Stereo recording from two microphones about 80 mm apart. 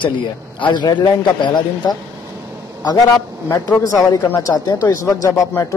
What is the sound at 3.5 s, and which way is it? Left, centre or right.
Speech, left.